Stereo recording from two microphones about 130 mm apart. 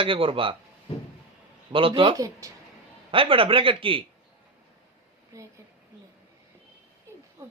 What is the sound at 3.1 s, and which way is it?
Speech, 45° right (ahead or behind).